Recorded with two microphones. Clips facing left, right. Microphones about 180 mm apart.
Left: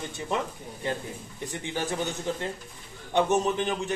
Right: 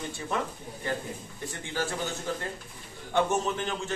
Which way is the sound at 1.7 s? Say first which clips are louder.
Left 1 dB; 20° left (ahead or behind).